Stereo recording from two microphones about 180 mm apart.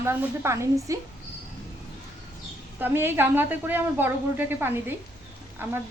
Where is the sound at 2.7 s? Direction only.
10° right (ahead or behind).